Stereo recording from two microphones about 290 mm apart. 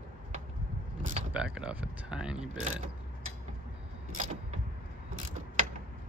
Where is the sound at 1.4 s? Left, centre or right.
Centre.